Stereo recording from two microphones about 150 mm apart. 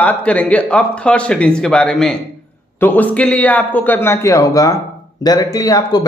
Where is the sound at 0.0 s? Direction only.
10° left (ahead or behind).